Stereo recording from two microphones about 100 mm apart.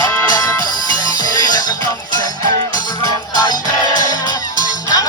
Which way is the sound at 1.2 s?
40° left (ahead or behind).